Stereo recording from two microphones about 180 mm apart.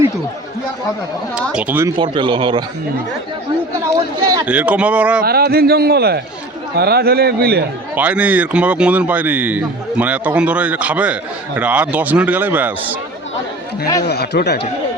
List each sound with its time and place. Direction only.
1.4 s speech: 5° right (ahead or behind)
2.0 s speech: 25° right (ahead or behind)
4.4 s speech: 10° right (ahead or behind)
5.2 s a man's voice: 60° right (ahead or behind)
7.9 s speech: 10° right (ahead or behind)
14.0 s speech: 65° left (ahead or behind)